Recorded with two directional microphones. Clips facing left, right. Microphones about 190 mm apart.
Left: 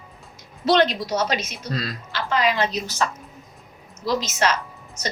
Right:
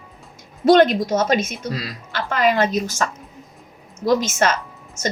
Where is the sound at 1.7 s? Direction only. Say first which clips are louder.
Left 1 dB; 10° right (ahead or behind).